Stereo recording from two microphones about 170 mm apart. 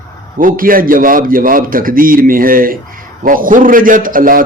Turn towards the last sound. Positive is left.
turn(degrees=-55)  # may be behind; listen again after turning